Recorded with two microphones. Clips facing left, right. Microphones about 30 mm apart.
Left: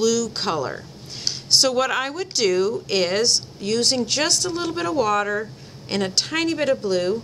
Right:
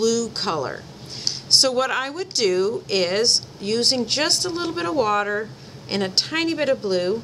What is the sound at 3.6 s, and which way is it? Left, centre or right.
Speech, centre.